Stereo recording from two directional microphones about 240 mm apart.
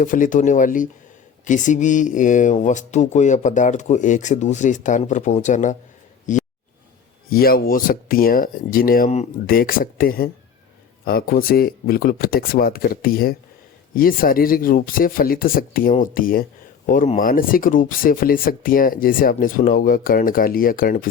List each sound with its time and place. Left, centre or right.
0.0 s speech: left